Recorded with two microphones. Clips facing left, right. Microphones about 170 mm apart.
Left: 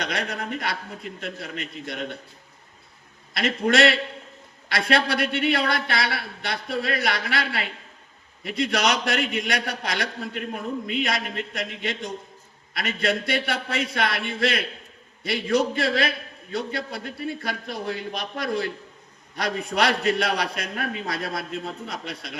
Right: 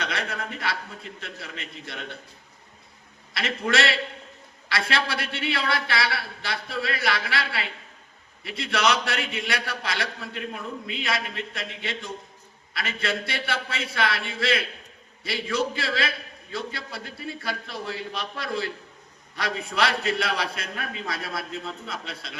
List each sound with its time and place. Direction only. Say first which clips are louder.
0.0 s a man's voice: left 2 dB; 55° left (ahead or behind)
3.3 s a man's voice: left 4 dB; 60° left (ahead or behind)